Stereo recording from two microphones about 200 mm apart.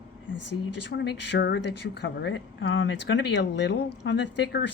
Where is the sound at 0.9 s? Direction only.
60° left (ahead or behind).